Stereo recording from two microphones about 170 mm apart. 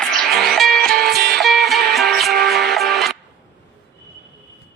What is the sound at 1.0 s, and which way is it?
Music, 70° right (ahead or behind).